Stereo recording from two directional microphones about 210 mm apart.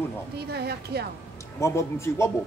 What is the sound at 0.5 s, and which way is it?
Speech, 50° right (ahead or behind).